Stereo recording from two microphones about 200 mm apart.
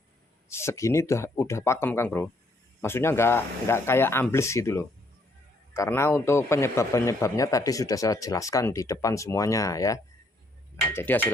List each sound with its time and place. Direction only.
0.4 s speech: 15° left (ahead or behind)